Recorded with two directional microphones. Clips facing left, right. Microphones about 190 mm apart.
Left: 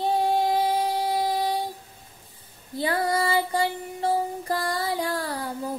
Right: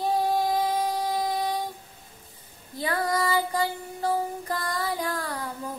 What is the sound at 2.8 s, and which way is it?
Music, 30° left (ahead or behind).